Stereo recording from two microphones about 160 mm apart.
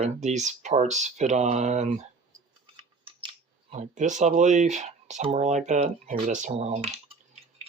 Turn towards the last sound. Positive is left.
turn(degrees=-40)  # may be behind; listen again after turning